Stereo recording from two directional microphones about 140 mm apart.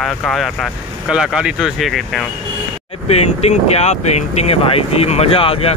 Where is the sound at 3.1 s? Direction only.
50° left (ahead or behind).